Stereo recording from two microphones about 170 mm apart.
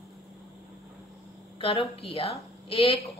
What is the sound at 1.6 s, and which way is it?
A woman's voice, 35° left (ahead or behind).